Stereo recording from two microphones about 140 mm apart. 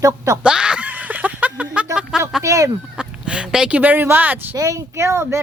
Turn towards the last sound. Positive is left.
turn(degrees=-20)  # may be behind; listen again after turning